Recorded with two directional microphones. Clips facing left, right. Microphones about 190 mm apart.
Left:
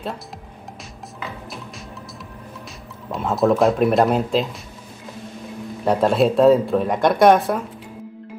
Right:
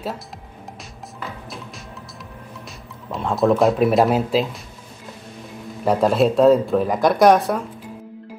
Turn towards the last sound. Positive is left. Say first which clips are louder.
# even
turn(degrees=0)  # may be behind; listen again after turning